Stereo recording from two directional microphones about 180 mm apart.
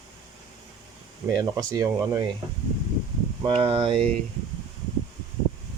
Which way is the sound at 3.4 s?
30° right (ahead or behind).